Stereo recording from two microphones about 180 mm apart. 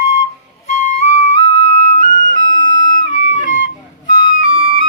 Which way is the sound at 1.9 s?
45° left (ahead or behind).